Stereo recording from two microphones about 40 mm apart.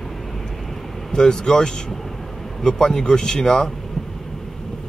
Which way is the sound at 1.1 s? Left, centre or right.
Centre.